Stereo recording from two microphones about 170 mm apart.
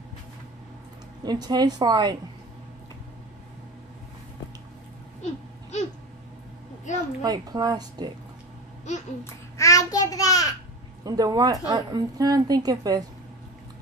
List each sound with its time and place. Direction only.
1.2 s a woman's voice: 25° right (ahead or behind)
6.9 s a sound: 45° left (ahead or behind)
7.2 s a woman's voice: 25° right (ahead or behind)
8.9 s babbling: 45° left (ahead or behind)
9.2 s child singing: 20° left (ahead or behind)
11.1 s a woman's voice: 20° right (ahead or behind)